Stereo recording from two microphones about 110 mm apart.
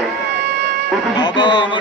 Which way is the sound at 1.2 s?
45° left (ahead or behind).